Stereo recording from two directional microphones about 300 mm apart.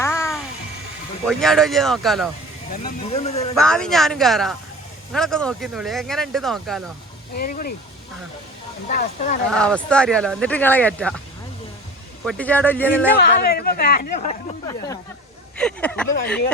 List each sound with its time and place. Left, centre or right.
0.0 s music: centre
1.3 s speech: centre
2.7 s speech: left
3.5 s speech: centre
7.3 s speech: left
8.9 s speech: left
9.5 s speech: centre
12.2 s speech: centre
13.1 s speech: left
15.5 s speech: centre